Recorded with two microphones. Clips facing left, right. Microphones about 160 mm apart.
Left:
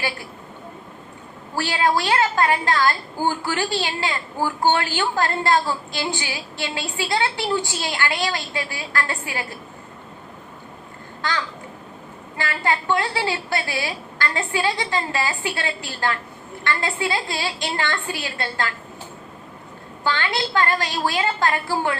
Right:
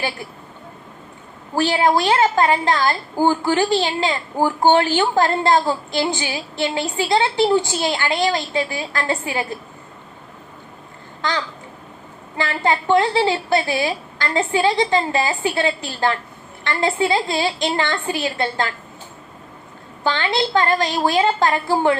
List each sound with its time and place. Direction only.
1.5 s a woman's voice: 20° right (ahead or behind)
11.2 s a sound: 20° right (ahead or behind)
12.4 s a woman's voice: 20° right (ahead or behind)
20.1 s a woman's voice: 20° right (ahead or behind)